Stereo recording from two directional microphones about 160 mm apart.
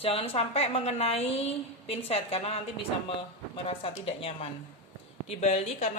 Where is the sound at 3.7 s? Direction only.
35° left (ahead or behind).